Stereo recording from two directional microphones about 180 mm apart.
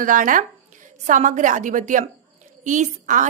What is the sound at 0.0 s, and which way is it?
A woman's voice, 45° right (ahead or behind).